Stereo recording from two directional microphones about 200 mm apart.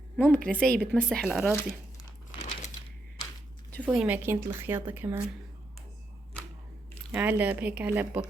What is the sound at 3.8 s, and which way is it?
Speech, 5° right (ahead or behind).